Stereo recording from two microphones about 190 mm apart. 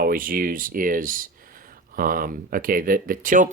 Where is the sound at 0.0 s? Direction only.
50° right (ahead or behind).